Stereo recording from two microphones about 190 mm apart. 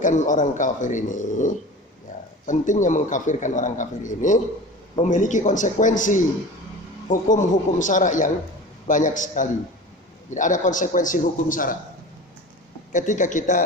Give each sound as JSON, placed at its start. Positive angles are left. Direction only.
{"t": 0.0, "sound": "a man's voice", "side_deg": 40}
{"t": 12.9, "sound": "speech", "side_deg": 40}